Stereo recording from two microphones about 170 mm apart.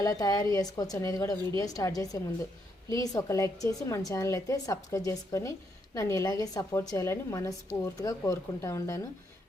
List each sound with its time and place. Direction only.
0.0 s a woman's voice: 20° left (ahead or behind)